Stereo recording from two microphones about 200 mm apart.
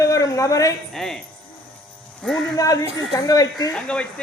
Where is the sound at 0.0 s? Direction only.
15° left (ahead or behind).